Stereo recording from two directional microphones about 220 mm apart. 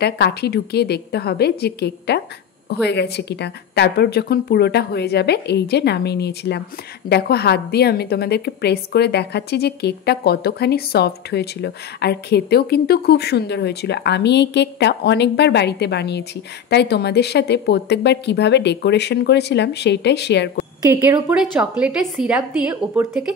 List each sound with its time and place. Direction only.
0.0 s a woman's voice: 45° left (ahead or behind)
20.8 s a woman's voice: 15° right (ahead or behind)